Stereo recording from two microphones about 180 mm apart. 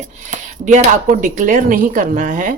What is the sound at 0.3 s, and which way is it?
Speech, 40° right (ahead or behind).